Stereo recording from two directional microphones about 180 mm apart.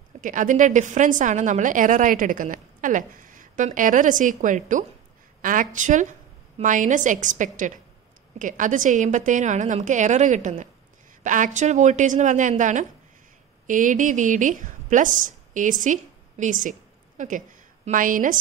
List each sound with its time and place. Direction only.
0.2 s a woman's voice: 45° right (ahead or behind)